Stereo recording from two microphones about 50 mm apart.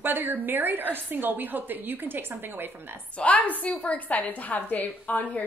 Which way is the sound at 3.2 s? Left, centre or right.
Left.